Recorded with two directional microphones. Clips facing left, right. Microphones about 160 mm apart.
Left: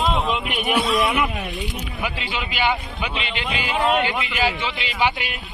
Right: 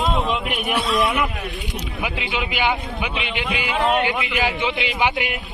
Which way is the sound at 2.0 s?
10° right (ahead or behind).